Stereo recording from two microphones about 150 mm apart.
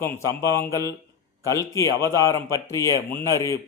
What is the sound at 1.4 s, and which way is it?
A man's voice, 20° left (ahead or behind).